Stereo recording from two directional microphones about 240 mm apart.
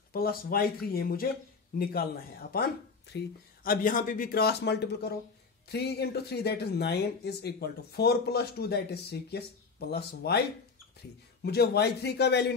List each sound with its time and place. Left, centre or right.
0.1 s speech: left
11.4 s speech: left